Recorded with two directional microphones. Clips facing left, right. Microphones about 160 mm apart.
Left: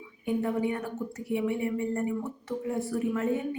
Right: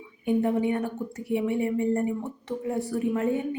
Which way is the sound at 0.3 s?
25° right (ahead or behind).